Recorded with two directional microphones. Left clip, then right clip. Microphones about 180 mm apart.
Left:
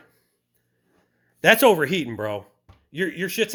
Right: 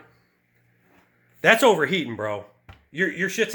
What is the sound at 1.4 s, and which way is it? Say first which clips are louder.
Speech: left 1 dB; 45° left (ahead or behind).